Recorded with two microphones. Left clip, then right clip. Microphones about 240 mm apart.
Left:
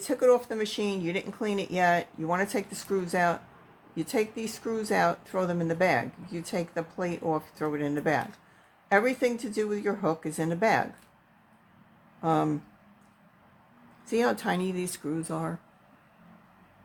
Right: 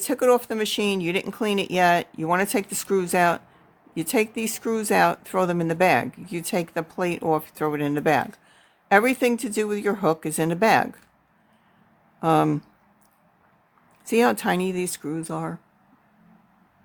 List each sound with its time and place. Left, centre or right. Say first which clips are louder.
0.0 s speech: right 3 dB; right
12.2 s speech: right 6 dB; right
14.0 s speech: right 6 dB; right